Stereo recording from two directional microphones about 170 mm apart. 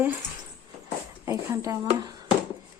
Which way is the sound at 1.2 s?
15° right (ahead or behind).